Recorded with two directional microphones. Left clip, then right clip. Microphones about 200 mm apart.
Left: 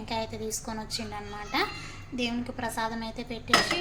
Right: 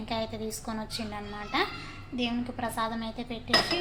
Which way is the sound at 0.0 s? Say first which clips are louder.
Even; centre (ahead or behind).